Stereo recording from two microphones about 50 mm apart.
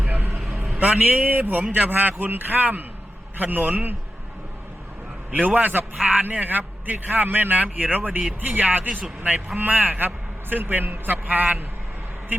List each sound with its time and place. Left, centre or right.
0.0 s a sound: right
0.9 s a man's voice: right
1.6 s a man's voice: right
1.9 s a man's voice: right
5.3 s a man's voice: right